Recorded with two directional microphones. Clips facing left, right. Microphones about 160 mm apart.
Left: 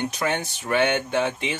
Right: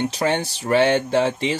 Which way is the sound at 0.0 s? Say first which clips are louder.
Right 4 dB; 30° right (ahead or behind).